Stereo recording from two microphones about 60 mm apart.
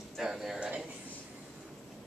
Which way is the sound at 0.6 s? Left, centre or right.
Centre.